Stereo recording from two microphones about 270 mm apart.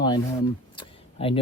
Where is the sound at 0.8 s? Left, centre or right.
Centre.